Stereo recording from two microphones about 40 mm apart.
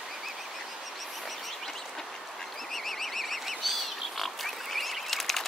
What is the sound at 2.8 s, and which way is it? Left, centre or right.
Frog, centre.